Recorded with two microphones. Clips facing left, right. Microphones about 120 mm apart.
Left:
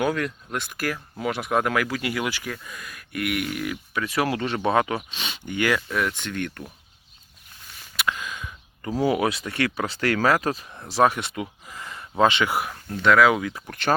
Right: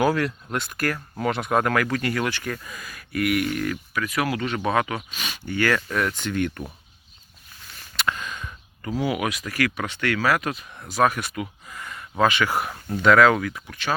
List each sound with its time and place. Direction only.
0.0 s speech: centre (ahead or behind)
3.9 s speech: 30° left (ahead or behind)
5.9 s speech: centre (ahead or behind)
7.9 s a sound: 5° left (ahead or behind)
8.8 s speech: 30° left (ahead or behind)
12.5 s speech: 5° left (ahead or behind)
12.7 s speech: 5° right (ahead or behind)
13.7 s speech: 55° left (ahead or behind)